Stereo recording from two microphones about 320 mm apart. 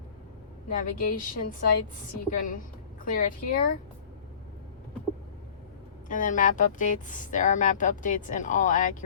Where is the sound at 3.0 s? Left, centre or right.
Left.